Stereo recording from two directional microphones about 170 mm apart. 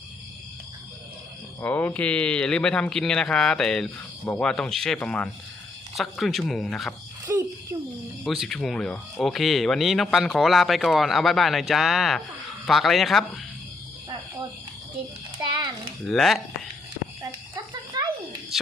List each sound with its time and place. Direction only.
1.6 s speech: 10° left (ahead or behind)
7.3 s a sound: 15° right (ahead or behind)
8.2 s speech: centre (ahead or behind)
16.0 s speech: centre (ahead or behind)
17.5 s a sound: 25° right (ahead or behind)
18.5 s speech: centre (ahead or behind)